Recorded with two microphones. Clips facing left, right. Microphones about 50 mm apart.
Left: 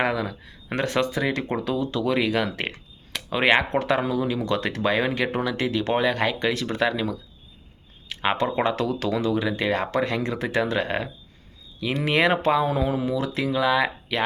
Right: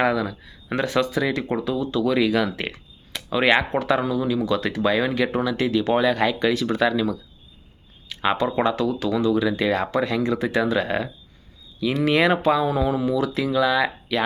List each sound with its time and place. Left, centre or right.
0.0 s speech: left
1.6 s speech: left
2.0 s speech: left
8.2 s speech: left
8.6 s speech: left
9.9 s speech: left